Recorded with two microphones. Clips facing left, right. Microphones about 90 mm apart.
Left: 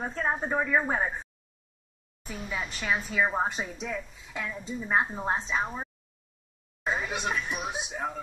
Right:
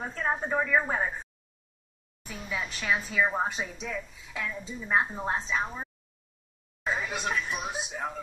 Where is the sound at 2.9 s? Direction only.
5° left (ahead or behind).